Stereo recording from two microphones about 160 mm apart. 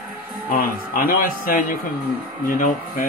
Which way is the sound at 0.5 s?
65° left (ahead or behind).